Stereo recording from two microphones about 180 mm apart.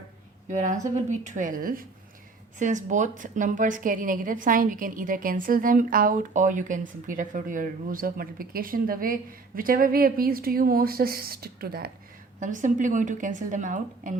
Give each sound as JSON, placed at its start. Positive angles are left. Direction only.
{"t": 0.4, "sound": "a woman's voice", "side_deg": -45}
{"t": 12.4, "sound": "a woman's voice", "side_deg": -45}